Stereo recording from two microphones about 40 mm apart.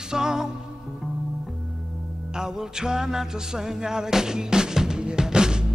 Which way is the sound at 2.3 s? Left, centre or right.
Centre.